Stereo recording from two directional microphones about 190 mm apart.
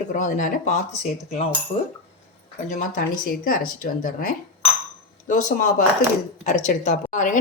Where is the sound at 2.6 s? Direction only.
40° left (ahead or behind).